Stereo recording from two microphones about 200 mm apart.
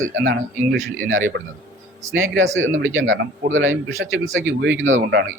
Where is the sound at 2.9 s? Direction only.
75° right (ahead or behind).